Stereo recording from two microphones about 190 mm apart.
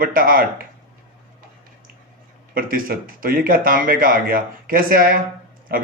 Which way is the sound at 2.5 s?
50° right (ahead or behind).